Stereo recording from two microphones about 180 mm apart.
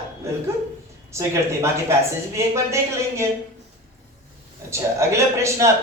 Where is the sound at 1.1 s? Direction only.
15° right (ahead or behind).